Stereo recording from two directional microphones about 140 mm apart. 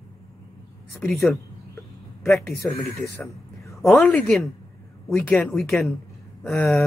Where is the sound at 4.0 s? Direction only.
10° left (ahead or behind).